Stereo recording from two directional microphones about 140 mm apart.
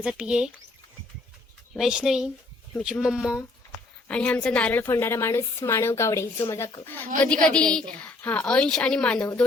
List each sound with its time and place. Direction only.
0.0 s speech: 5° right (ahead or behind)
1.7 s speech: 5° right (ahead or behind)
4.1 s a woman's voice: 10° left (ahead or behind)